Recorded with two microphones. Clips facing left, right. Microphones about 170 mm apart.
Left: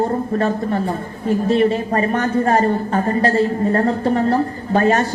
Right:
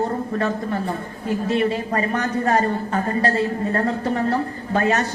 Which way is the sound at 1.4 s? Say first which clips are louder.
Left 5 dB; 30° left (ahead or behind).